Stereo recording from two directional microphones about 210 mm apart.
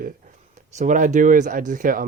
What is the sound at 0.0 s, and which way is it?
Speech, 35° right (ahead or behind).